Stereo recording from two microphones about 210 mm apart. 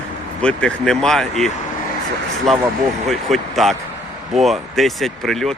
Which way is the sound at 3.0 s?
Centre (ahead or behind).